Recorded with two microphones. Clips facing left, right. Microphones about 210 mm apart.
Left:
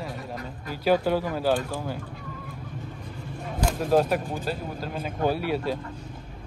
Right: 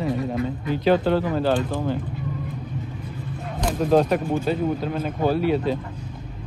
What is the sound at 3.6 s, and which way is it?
Speech, 5° left (ahead or behind).